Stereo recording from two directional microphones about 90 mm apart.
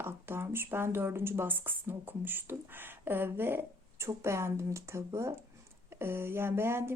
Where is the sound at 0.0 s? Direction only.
25° right (ahead or behind).